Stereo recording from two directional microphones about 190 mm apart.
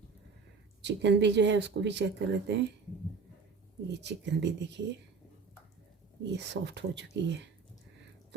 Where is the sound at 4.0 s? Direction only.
65° right (ahead or behind).